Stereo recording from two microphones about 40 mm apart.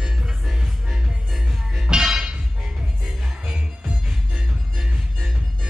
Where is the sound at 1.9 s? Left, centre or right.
Centre.